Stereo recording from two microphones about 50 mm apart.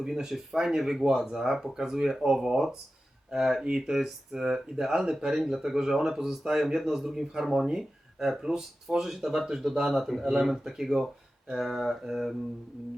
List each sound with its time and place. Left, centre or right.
0.0 s a man's voice: centre